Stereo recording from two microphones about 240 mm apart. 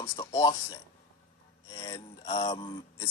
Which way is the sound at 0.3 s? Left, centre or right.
Centre.